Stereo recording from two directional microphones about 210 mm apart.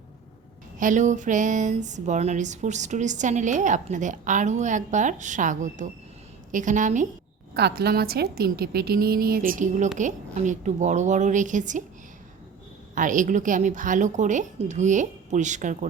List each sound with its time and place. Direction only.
0.8 s speech: 35° right (ahead or behind)
7.5 s a woman's voice: 50° right (ahead or behind)
12.9 s speech: 40° right (ahead or behind)